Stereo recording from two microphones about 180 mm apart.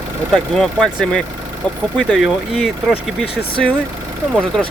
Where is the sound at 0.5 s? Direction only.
Centre (ahead or behind).